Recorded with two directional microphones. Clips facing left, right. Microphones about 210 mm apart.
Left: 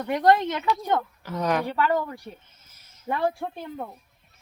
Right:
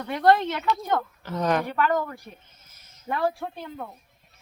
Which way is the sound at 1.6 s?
30° left (ahead or behind).